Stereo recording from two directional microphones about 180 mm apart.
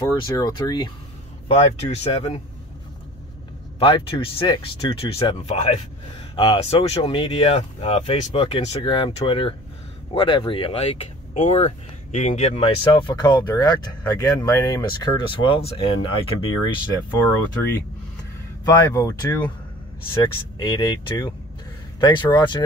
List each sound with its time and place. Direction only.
0.1 s speech: 20° left (ahead or behind)
1.5 s speech: 35° left (ahead or behind)
3.8 s speech: 30° left (ahead or behind)
6.3 s speech: 30° left (ahead or behind)
20.5 s speech: 25° left (ahead or behind)